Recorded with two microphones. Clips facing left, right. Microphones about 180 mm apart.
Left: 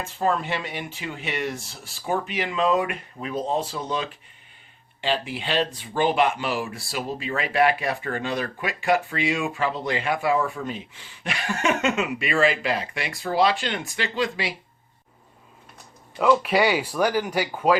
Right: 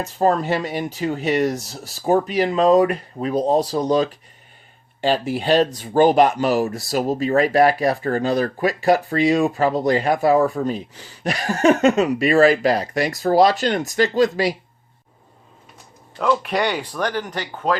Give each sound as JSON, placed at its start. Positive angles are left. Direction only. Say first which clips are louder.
{"t": 0.0, "sound": "speech", "louder": "right 6 dB", "side_deg": -40}
{"t": 16.1, "sound": "speech", "louder": "left 1 dB", "side_deg": 5}